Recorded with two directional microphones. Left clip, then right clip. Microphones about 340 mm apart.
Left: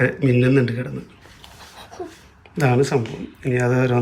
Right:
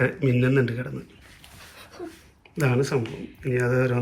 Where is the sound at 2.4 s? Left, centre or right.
Centre.